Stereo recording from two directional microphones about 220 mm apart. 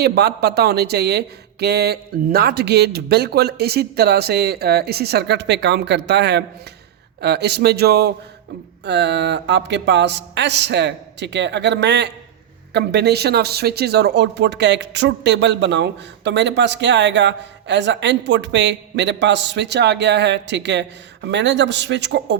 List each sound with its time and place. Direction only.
0.0 s speech: 45° right (ahead or behind)